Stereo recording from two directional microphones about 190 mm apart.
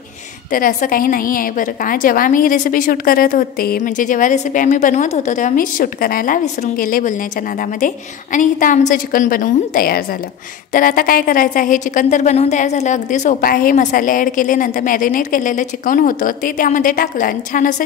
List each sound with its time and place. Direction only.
0.5 s speech: 45° left (ahead or behind)